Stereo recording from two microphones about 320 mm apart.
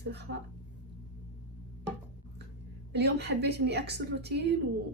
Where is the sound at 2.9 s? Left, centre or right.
Right.